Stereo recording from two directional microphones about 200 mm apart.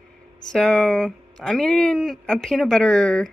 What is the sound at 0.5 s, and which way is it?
Speech, 5° left (ahead or behind).